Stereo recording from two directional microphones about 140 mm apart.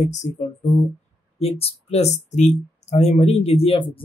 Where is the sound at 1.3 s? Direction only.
45° left (ahead or behind).